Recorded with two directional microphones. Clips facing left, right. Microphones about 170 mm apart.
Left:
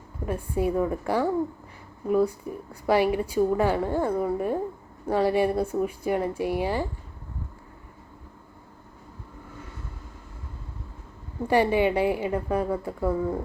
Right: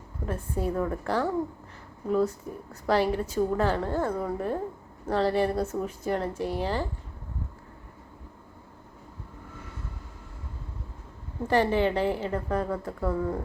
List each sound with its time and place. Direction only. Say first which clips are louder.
0.3 s a woman's voice: left 4 dB; 10° left (ahead or behind)
11.4 s a woman's voice: left 2 dB; 10° left (ahead or behind)